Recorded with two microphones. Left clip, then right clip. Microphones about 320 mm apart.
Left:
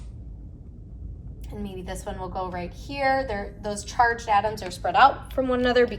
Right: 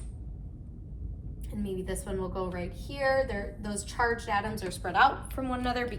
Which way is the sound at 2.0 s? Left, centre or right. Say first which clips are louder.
Left 6 dB; left.